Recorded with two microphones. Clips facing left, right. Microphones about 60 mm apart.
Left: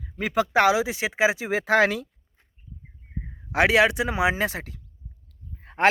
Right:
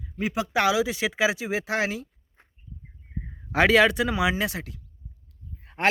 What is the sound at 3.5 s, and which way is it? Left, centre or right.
A man's voice, centre.